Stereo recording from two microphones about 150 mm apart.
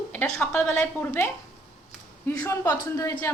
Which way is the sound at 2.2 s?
20° left (ahead or behind).